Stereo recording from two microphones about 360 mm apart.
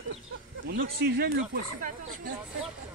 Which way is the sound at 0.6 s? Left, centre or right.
Right.